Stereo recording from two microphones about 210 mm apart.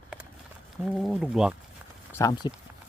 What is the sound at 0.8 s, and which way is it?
Speech, centre (ahead or behind).